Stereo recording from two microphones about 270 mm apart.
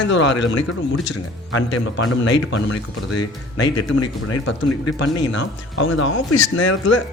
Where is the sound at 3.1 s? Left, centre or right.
Left.